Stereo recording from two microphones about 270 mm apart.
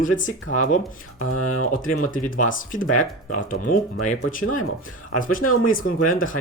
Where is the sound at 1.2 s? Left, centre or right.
Left.